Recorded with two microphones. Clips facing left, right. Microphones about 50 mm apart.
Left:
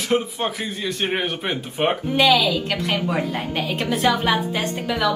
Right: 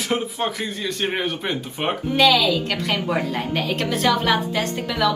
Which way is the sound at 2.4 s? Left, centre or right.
Centre.